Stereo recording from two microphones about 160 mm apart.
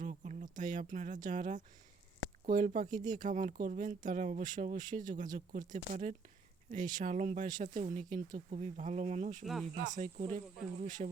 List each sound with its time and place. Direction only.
0.0 s speech: 50° right (ahead or behind)